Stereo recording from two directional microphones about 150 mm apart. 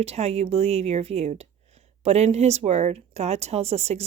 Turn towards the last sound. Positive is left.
turn(degrees=-45)  # may be behind; listen again after turning